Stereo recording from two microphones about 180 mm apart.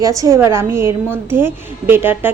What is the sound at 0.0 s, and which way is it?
A woman's voice, 20° right (ahead or behind).